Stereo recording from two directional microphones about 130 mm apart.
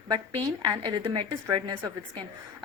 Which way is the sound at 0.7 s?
35° right (ahead or behind).